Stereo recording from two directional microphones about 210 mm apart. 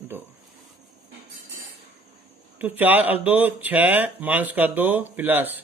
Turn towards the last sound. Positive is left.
turn(degrees=-10)  # may be behind; listen again after turning